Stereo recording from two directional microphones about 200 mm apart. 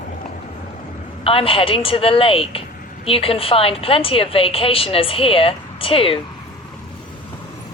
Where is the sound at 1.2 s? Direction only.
25° left (ahead or behind).